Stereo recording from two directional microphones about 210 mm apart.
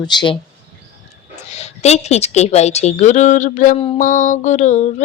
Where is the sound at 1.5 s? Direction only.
30° left (ahead or behind).